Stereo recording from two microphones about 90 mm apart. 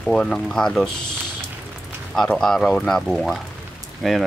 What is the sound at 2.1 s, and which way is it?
Speech, 5° left (ahead or behind).